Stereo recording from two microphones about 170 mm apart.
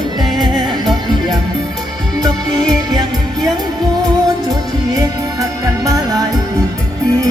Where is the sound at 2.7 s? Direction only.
25° right (ahead or behind).